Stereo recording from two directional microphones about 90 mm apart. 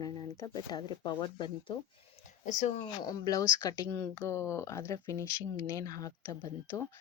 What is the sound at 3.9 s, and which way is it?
A woman's voice, 30° left (ahead or behind).